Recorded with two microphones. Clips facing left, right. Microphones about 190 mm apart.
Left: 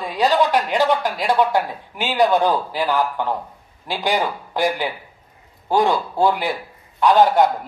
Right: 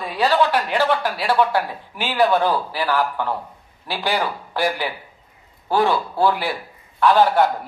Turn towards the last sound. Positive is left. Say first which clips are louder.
# left 1 dB
turn(degrees=15)  # may be behind; listen again after turning